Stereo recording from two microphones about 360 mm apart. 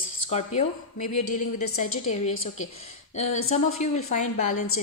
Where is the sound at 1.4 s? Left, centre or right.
Left.